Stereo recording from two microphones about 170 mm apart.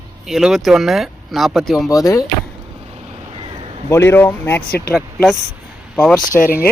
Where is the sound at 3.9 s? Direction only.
15° left (ahead or behind).